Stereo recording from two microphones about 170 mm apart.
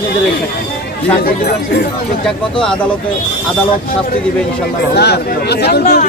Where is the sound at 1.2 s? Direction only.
60° left (ahead or behind).